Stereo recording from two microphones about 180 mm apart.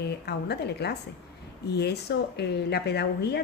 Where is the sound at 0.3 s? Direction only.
65° left (ahead or behind).